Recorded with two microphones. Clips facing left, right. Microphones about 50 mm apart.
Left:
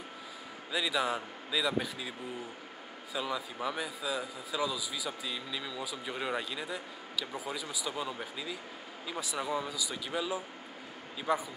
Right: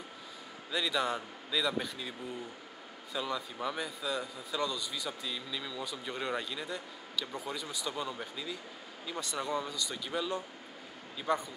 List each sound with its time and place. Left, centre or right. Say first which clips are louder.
0.7 s a man's voice: left 1 dB; centre